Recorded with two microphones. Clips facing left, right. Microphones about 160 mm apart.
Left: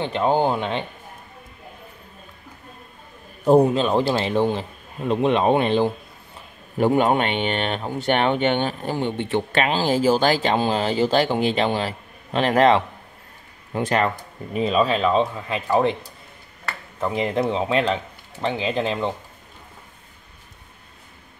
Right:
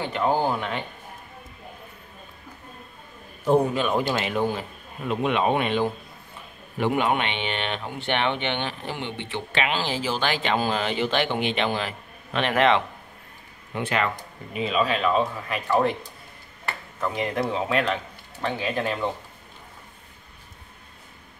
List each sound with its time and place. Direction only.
0.0 s speech: 25° left (ahead or behind)
3.4 s speech: 35° left (ahead or behind)
17.0 s speech: 25° left (ahead or behind)